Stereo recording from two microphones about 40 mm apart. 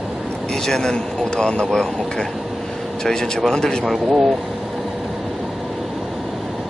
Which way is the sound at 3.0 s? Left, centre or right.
Centre.